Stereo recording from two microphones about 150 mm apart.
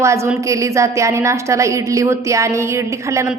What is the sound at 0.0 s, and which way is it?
A woman's voice, 20° right (ahead or behind).